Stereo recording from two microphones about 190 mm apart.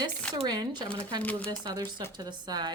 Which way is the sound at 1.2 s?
10° left (ahead or behind).